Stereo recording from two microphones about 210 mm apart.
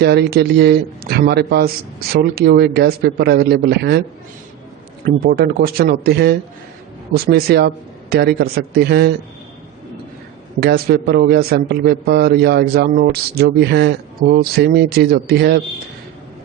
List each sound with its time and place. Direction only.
0.0 s a man's voice: 50° right (ahead or behind)
5.0 s a man's voice: 45° right (ahead or behind)
10.6 s a man's voice: 50° right (ahead or behind)